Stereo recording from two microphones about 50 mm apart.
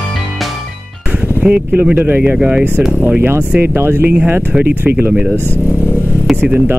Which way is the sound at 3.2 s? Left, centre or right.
Right.